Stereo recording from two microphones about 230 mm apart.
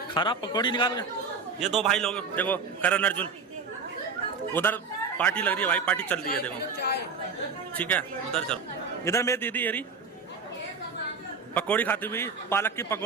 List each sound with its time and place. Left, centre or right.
0.1 s a man's voice: centre
1.5 s a man's voice: centre
4.5 s a man's voice: centre
6.2 s speech: left
7.8 s a man's voice: centre
11.5 s a man's voice: centre